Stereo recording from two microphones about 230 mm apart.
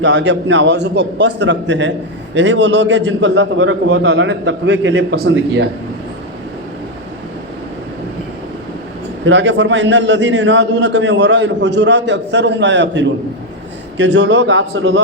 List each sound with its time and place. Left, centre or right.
0.0 s a man's voice: right
9.2 s a man's voice: right